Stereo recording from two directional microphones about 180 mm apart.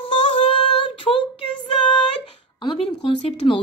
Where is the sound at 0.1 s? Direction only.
30° left (ahead or behind).